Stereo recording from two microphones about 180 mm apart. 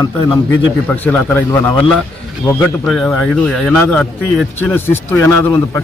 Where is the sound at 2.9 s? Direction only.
Centre (ahead or behind).